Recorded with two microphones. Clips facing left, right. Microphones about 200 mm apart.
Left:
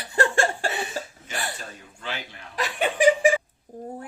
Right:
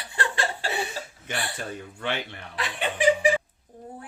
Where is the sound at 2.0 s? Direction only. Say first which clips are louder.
Right 4 dB; 60° right (ahead or behind).